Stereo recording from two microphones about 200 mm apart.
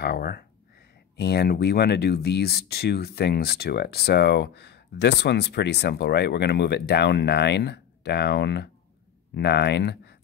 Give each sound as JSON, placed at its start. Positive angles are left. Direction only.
{"t": 0.0, "sound": "speech", "side_deg": 50}